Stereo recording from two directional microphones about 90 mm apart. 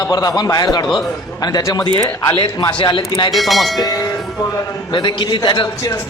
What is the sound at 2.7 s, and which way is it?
Speech, 60° left (ahead or behind).